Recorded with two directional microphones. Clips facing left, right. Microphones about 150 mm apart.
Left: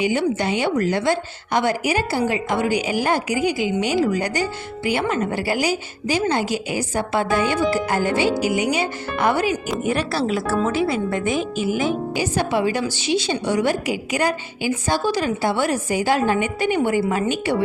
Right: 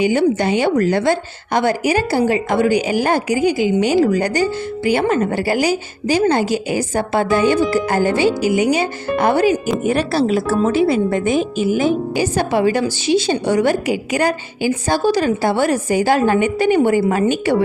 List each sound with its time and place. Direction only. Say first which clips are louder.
0.0 s a woman's voice: right 5 dB; 45° right (ahead or behind)